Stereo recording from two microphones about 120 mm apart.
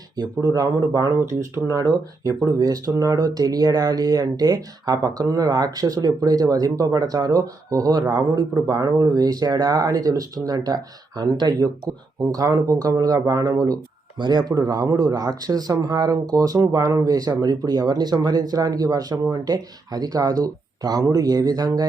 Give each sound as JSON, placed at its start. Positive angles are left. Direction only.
{"t": 0.2, "sound": "speech", "side_deg": -35}